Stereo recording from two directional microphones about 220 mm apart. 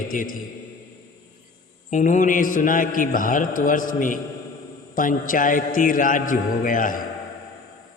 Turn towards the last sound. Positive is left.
turn(degrees=35)  # may be behind; listen again after turning